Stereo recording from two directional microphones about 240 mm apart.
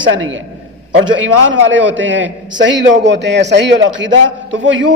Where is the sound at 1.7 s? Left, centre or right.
Right.